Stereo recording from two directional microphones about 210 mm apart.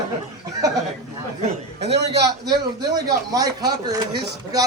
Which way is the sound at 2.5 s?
15° right (ahead or behind).